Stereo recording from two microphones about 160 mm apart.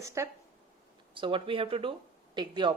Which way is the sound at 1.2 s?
30° right (ahead or behind).